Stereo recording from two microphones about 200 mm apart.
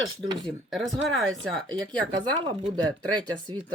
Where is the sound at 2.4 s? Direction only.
20° right (ahead or behind).